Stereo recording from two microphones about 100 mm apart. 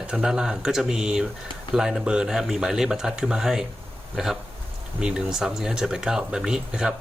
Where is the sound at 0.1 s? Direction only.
5° right (ahead or behind).